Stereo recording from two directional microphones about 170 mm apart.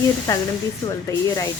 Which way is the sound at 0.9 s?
20° left (ahead or behind).